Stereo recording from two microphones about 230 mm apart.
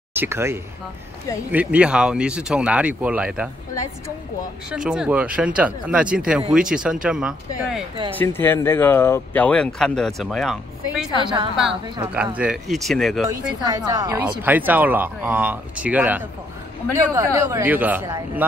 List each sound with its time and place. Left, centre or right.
0.1 s speech: centre
4.6 s speech: centre
8.2 s speech: centre
12.4 s speech: centre
13.7 s speech: centre